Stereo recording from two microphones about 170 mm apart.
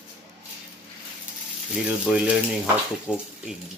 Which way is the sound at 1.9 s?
5° right (ahead or behind).